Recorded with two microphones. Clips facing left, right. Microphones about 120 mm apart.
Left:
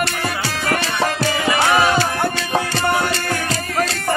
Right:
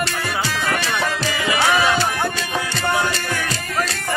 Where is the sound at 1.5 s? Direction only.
50° left (ahead or behind).